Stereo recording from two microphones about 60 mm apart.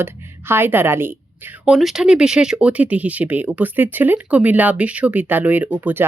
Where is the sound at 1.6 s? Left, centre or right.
Centre.